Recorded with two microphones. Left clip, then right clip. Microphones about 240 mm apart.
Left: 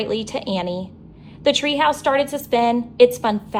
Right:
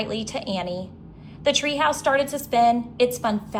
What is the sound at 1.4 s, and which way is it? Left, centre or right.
A woman's voice, left.